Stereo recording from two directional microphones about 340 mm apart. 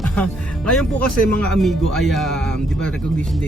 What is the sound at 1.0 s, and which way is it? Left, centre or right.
Speech, right.